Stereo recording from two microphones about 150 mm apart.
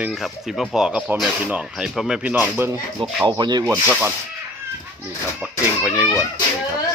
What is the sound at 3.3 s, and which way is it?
Rub, 30° right (ahead or behind).